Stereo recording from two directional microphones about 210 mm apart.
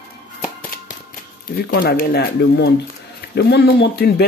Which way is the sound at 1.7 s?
45° left (ahead or behind).